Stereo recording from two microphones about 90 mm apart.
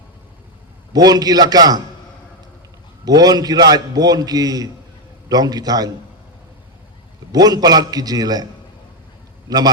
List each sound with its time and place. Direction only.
0.9 s a man's voice: 45° right (ahead or behind)
3.0 s a man's voice: 45° right (ahead or behind)
7.3 s a man's voice: 45° right (ahead or behind)